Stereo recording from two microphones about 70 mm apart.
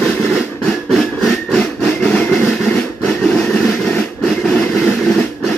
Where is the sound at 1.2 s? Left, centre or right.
Centre.